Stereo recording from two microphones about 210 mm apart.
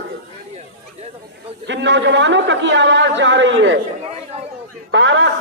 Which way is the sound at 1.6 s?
60° right (ahead or behind).